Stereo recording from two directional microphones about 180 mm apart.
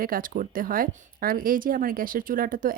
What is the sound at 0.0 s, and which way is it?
Speech, 50° right (ahead or behind).